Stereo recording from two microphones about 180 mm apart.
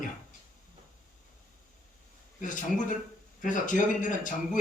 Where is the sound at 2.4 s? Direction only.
45° left (ahead or behind).